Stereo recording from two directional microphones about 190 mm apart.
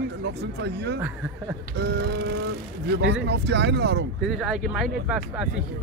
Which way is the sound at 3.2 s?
65° right (ahead or behind).